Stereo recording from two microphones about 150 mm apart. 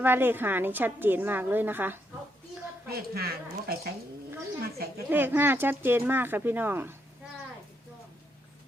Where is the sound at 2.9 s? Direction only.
90° right.